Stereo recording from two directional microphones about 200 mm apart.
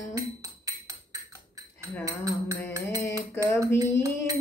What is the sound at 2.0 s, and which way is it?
Music, 15° right (ahead or behind).